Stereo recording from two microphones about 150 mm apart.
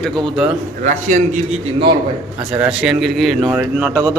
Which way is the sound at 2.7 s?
5° right (ahead or behind).